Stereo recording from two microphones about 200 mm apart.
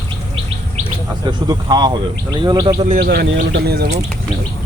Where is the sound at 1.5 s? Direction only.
20° right (ahead or behind).